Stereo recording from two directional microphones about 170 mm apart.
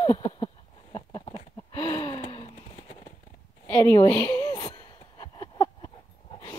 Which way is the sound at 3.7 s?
15° left (ahead or behind).